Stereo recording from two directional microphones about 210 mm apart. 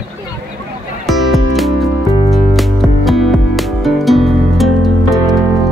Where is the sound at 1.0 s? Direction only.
Centre (ahead or behind).